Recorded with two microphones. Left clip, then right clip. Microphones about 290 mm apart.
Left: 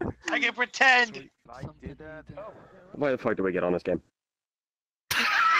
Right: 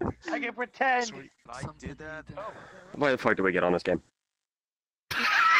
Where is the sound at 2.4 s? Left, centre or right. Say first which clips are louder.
Right 3 dB; right.